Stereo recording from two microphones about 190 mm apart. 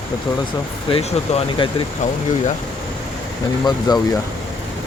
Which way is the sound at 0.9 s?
30° left (ahead or behind).